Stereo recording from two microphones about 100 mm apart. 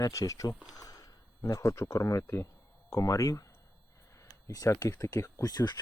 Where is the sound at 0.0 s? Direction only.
30° left (ahead or behind).